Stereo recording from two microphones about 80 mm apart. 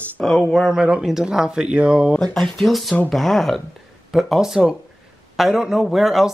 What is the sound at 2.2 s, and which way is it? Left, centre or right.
Speech, centre.